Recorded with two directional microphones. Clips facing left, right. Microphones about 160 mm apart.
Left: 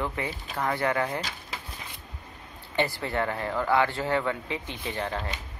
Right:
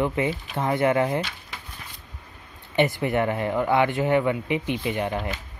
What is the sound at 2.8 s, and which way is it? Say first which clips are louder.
Speech: right 6 dB; 20° right (ahead or behind).